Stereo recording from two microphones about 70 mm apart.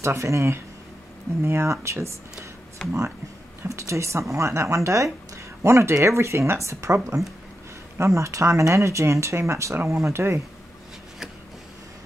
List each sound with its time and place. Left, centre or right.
0.0 s speech: right
3.6 s speech: right
8.0 s speech: right